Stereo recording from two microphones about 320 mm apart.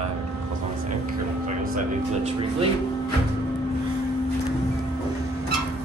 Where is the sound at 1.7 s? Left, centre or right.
Centre.